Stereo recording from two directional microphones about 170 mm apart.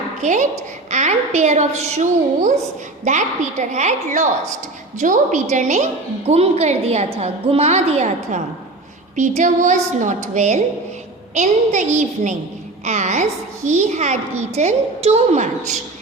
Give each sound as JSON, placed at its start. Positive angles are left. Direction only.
{"t": 0.2, "sound": "a woman's voice", "side_deg": -45}